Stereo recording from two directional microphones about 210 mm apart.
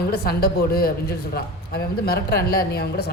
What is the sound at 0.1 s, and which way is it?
A woman's voice, 45° left (ahead or behind).